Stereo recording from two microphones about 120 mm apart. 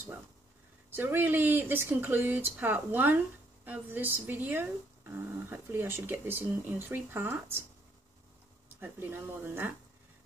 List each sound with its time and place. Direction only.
0.8 s speech: 20° right (ahead or behind)
8.7 s speech: 15° right (ahead or behind)